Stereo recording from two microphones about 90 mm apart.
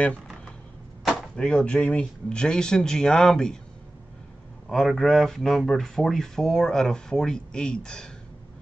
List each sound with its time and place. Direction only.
1.1 s speech: 10° left (ahead or behind)
4.6 s speech: centre (ahead or behind)